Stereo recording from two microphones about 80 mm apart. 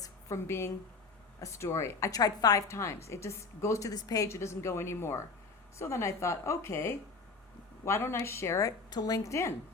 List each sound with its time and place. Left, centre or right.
0.0 s a sound: left
1.4 s a woman's voice: left
2.6 s a woman's voice: left
4.3 s a woman's voice: left